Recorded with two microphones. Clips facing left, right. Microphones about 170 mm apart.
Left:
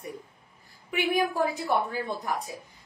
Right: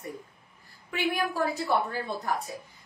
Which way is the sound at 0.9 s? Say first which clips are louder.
Left 3 dB; 15° left (ahead or behind).